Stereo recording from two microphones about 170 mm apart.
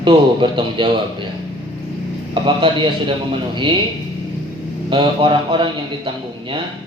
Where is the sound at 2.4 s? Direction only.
30° right (ahead or behind).